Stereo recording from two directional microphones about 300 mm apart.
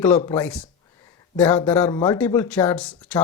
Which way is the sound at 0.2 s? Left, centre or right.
Centre.